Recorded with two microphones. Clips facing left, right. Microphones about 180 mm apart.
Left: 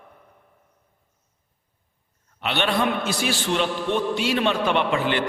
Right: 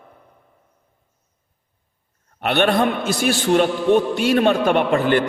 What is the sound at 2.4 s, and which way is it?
A man's voice, 50° right (ahead or behind).